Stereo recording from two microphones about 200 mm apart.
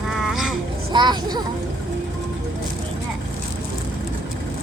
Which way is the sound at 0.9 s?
20° right (ahead or behind).